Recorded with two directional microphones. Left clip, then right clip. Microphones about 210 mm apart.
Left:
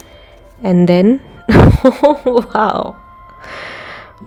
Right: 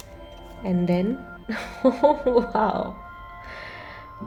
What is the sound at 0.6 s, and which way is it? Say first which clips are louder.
A woman's voice: left 14 dB; 45° left (ahead or behind).